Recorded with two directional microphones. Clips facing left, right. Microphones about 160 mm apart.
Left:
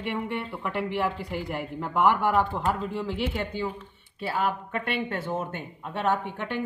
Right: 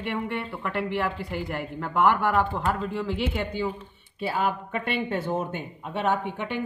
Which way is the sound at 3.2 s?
5° right (ahead or behind).